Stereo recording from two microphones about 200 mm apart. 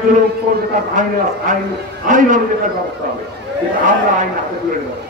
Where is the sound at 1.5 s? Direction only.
40° right (ahead or behind).